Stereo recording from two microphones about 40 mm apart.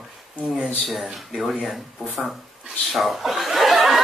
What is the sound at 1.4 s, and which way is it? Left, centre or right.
A capella, centre.